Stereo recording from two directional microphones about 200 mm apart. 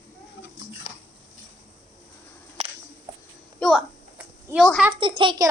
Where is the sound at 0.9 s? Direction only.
30° left (ahead or behind).